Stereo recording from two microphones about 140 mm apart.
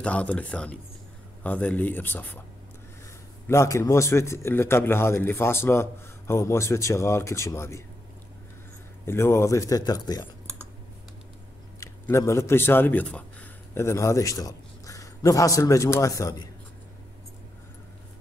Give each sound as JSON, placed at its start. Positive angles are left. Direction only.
{"t": 0.0, "sound": "speech", "side_deg": 10}
{"t": 3.4, "sound": "a man's voice", "side_deg": 20}
{"t": 9.0, "sound": "a man's voice", "side_deg": 20}
{"t": 11.8, "sound": "a man's voice", "side_deg": 20}